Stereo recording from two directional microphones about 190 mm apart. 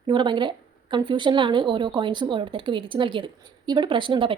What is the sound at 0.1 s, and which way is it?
A woman's voice, 25° right (ahead or behind).